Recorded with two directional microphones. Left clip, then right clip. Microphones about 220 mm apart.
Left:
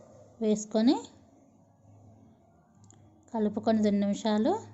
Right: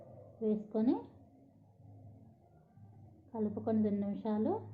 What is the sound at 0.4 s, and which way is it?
Speech, 45° left (ahead or behind).